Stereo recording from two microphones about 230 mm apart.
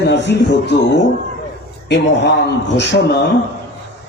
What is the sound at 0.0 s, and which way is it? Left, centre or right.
Speech, left.